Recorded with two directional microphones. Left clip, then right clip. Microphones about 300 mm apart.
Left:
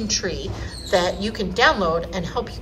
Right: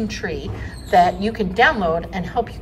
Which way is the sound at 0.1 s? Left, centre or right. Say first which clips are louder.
Left 2 dB; centre.